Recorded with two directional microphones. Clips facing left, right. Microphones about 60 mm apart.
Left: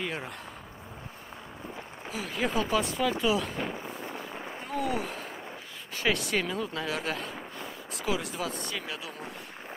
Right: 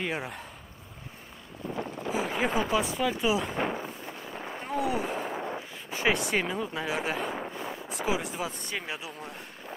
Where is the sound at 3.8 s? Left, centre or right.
Centre.